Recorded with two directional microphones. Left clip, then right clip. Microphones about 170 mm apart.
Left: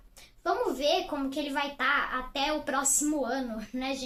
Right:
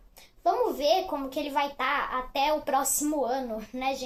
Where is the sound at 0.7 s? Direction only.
15° right (ahead or behind).